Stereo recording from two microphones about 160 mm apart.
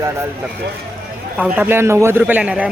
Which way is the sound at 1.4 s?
10° right (ahead or behind).